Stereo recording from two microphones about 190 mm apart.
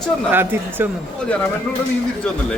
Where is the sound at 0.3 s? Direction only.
10° right (ahead or behind).